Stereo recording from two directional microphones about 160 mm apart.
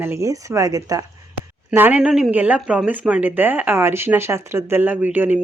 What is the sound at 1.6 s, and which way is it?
Speech, 10° right (ahead or behind).